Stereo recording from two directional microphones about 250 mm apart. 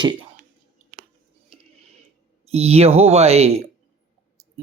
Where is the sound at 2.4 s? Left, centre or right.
Right.